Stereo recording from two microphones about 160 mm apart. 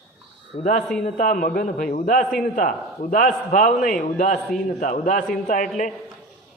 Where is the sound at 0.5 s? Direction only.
60° left (ahead or behind).